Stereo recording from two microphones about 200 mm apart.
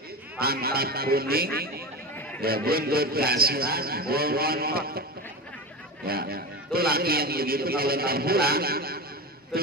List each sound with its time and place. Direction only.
0.4 s a man's voice: 50° right (ahead or behind)
6.0 s a man's voice: 50° right (ahead or behind)